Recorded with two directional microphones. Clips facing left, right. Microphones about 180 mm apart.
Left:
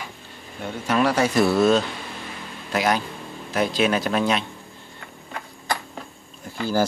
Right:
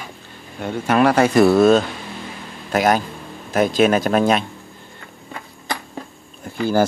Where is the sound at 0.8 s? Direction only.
55° right (ahead or behind).